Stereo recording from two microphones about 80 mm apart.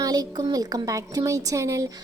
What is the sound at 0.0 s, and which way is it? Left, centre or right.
A woman's voice, right.